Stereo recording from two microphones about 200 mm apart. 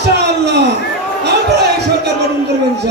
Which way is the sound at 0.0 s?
55° right (ahead or behind).